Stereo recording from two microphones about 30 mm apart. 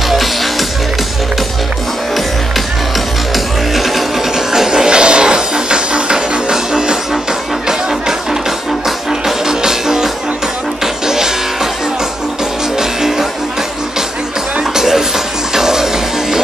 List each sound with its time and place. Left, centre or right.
0.1 s music: centre
3.3 s music: centre
4.5 s music: centre
11.1 s music: centre
12.7 s music: centre
14.6 s music: centre